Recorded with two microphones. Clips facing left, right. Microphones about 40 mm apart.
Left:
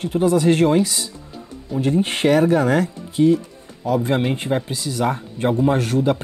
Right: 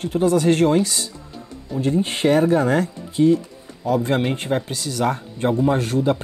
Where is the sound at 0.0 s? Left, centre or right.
Centre.